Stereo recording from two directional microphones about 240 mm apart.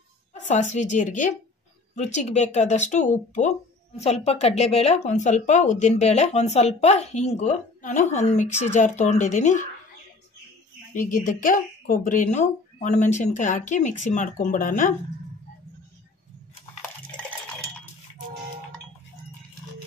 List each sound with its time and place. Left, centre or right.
0.3 s a woman's voice: left
10.9 s speech: left